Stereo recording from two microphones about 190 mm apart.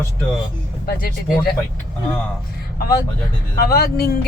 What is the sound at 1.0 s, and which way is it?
Speech, 55° left (ahead or behind).